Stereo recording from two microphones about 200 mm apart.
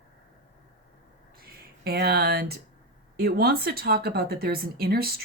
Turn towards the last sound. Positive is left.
turn(degrees=-50)  # may be behind; listen again after turning